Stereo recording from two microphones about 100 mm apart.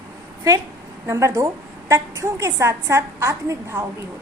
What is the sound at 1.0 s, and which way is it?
A woman's voice, 30° right (ahead or behind).